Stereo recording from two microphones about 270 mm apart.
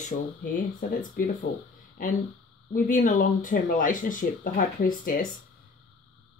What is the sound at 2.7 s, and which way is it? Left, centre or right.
Speech, left.